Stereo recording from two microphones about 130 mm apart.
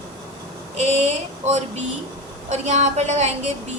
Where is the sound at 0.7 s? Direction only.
55° right (ahead or behind).